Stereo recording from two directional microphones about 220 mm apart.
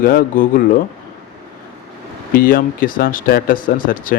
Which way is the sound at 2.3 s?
40° left (ahead or behind).